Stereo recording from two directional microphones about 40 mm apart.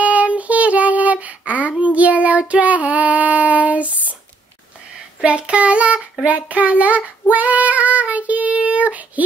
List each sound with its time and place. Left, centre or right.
0.0 s child singing: right
5.2 s child singing: right